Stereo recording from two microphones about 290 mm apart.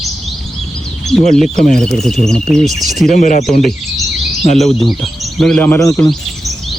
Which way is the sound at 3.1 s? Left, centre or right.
Left.